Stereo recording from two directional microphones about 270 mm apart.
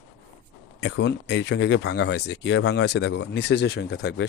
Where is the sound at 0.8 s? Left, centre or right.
Left.